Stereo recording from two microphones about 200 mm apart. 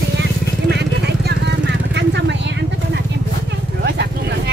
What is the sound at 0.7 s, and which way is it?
Vehicle, 55° right (ahead or behind).